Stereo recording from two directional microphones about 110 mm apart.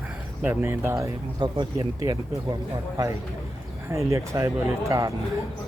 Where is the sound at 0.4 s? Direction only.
20° right (ahead or behind); by 2.6 s 35° right (ahead or behind).